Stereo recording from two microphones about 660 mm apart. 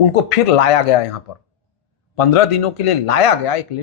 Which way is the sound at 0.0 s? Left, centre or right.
Left.